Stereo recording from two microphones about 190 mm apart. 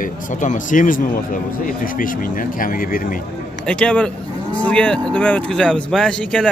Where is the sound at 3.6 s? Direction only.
5° left (ahead or behind).